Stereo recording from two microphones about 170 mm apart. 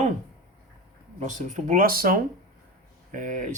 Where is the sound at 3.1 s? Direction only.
50° right (ahead or behind).